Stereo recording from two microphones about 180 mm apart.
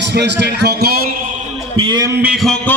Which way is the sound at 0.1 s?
70° right (ahead or behind).